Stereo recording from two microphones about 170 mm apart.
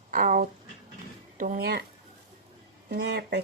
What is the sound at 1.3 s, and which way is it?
Speech, 60° right (ahead or behind).